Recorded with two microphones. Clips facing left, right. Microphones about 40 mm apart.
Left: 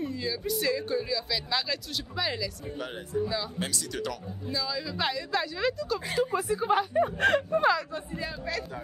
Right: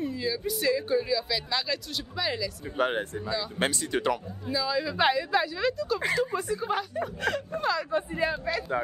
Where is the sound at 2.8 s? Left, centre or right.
Right.